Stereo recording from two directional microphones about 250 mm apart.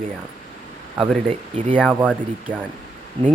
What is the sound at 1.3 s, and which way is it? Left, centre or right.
Speech, right.